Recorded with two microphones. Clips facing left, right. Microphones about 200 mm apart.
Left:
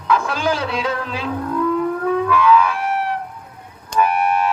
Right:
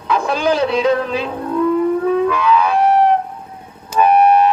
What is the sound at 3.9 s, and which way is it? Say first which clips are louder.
Car alarm: right 3 dB; 5° right (ahead or behind).